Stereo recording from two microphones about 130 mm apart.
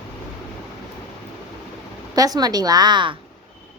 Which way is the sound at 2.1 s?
30° right (ahead or behind).